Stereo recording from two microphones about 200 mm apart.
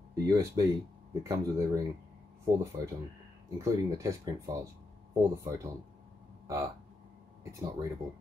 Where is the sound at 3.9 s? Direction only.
15° right (ahead or behind).